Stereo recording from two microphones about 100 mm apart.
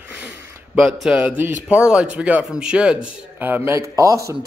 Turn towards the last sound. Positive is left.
turn(degrees=-30)  # may be behind; listen again after turning